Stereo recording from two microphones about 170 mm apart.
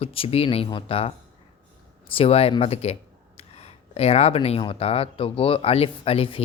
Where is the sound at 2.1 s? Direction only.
35° left (ahead or behind).